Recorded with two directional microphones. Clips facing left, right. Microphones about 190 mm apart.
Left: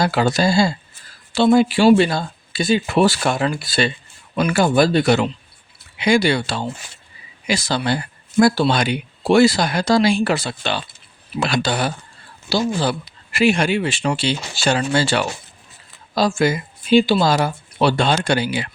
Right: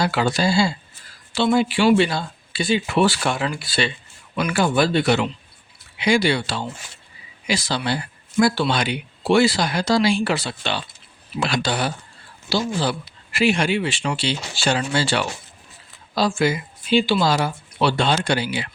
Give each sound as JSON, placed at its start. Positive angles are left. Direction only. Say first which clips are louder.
{"t": 0.0, "sound": "speech", "louder": "left 3 dB", "side_deg": 45}